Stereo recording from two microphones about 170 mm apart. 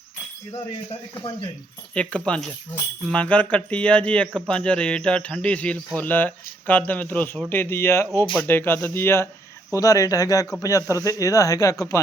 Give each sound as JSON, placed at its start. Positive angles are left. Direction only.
{"t": 2.0, "sound": "speech", "side_deg": 5}